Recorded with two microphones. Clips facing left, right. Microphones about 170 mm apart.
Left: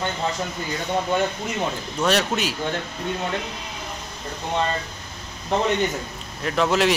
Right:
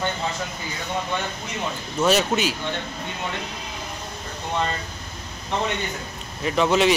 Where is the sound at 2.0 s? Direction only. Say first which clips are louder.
Right 2 dB; centre (ahead or behind).